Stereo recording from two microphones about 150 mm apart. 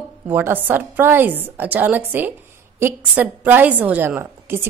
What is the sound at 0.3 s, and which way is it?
A woman's voice, 15° right (ahead or behind).